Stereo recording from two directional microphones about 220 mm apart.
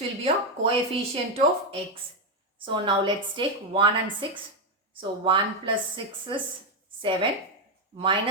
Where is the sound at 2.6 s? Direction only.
20° right (ahead or behind).